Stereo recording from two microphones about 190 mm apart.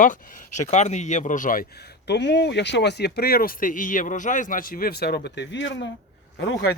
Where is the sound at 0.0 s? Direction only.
45° left (ahead or behind); by 6.7 s 70° left (ahead or behind).